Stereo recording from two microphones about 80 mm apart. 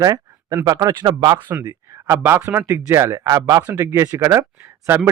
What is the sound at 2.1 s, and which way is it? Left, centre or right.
Speech, right.